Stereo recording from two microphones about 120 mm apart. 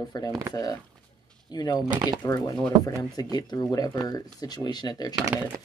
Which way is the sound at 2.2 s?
30° left (ahead or behind).